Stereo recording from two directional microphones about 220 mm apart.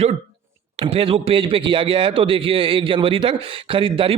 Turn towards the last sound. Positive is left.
turn(degrees=-25)  # may be behind; listen again after turning